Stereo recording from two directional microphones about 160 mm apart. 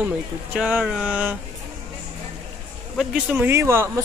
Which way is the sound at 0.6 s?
5° right (ahead or behind).